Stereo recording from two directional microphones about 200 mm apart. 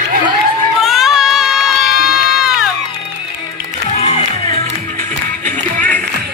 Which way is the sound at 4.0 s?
35° left (ahead or behind).